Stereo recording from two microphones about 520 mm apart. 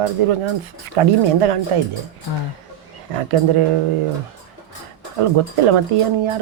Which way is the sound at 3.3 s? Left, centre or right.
Right.